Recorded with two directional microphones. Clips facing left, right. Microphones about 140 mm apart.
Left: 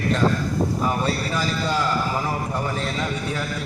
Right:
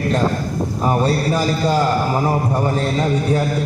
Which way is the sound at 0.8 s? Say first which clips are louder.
Right 6 dB; 40° right (ahead or behind).